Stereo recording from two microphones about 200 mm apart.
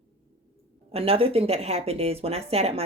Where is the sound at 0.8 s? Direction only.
30° right (ahead or behind).